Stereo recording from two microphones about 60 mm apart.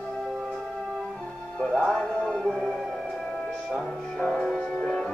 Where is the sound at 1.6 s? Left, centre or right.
Centre.